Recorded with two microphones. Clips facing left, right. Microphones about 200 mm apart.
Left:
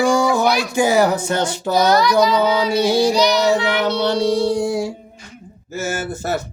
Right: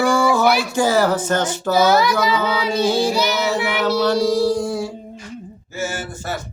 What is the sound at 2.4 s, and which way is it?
Child singing, 10° left (ahead or behind).